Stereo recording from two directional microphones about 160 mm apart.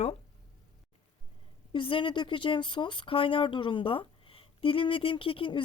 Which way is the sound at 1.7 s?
35° left (ahead or behind).